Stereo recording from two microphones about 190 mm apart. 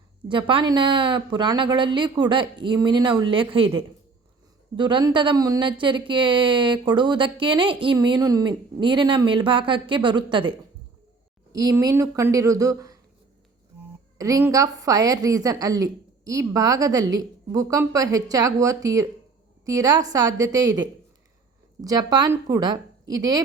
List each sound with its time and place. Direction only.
0.3 s speech: 25° right (ahead or behind)
11.5 s a woman's voice: 20° right (ahead or behind)
14.2 s a woman's voice: 15° right (ahead or behind)